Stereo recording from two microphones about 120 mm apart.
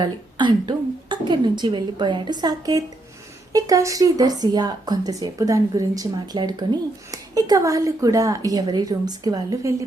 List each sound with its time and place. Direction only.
0.0 s a woman's voice: 40° right (ahead or behind)